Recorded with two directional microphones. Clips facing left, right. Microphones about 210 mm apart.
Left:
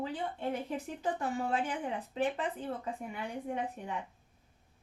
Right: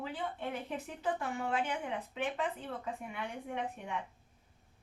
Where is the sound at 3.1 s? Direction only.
35° left (ahead or behind).